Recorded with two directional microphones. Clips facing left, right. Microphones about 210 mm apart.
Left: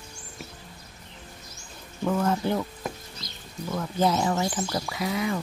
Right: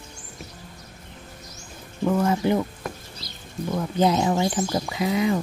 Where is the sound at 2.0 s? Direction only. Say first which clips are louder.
Right 4 dB; 10° right (ahead or behind).